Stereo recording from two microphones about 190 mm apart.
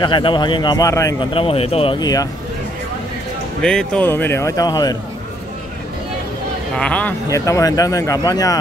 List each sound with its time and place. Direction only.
0.0 s speech: 25° left (ahead or behind)
1.3 s speech: 30° left (ahead or behind)
3.6 s speech: 5° left (ahead or behind)
6.8 s speech: 5° left (ahead or behind)